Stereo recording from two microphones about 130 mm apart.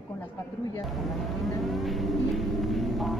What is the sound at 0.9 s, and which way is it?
Vehicle, centre (ahead or behind).